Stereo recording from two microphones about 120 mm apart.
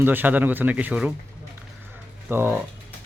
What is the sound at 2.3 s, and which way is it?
Speech, 20° right (ahead or behind).